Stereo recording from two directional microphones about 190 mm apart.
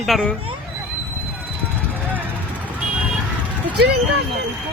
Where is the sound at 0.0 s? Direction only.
Centre (ahead or behind).